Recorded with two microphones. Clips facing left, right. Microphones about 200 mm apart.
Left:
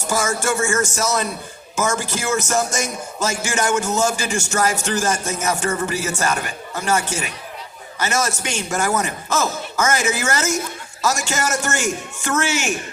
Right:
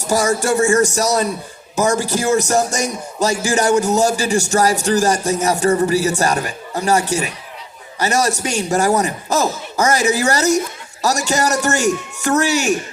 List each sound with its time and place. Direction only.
0.0 s speech: 35° right (ahead or behind)